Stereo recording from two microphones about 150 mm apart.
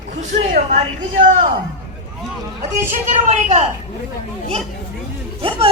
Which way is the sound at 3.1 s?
55° right (ahead or behind).